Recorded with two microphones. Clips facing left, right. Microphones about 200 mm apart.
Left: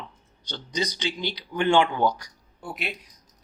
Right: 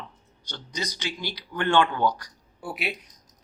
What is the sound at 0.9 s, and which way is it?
Speech, 20° left (ahead or behind).